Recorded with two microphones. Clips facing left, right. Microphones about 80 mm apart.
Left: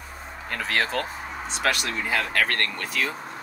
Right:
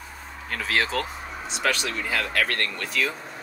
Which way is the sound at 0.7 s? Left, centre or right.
Centre.